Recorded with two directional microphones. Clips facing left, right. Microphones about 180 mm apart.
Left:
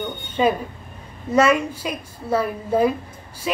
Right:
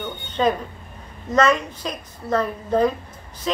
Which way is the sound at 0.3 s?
10° left (ahead or behind).